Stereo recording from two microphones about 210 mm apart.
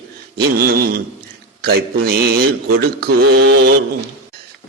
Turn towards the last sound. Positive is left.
turn(degrees=-50)  # may be behind; listen again after turning